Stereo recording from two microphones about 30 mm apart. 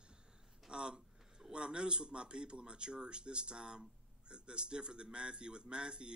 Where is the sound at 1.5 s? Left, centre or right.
Right.